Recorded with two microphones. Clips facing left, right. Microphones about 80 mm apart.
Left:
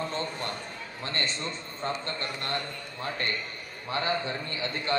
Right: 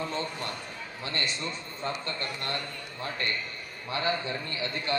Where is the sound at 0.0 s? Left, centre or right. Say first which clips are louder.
Left 1 dB; left.